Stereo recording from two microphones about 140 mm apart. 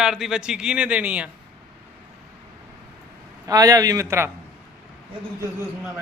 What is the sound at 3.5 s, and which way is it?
Speech, 25° right (ahead or behind).